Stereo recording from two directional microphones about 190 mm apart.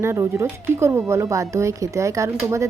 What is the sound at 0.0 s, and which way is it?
A woman's voice, 15° right (ahead or behind).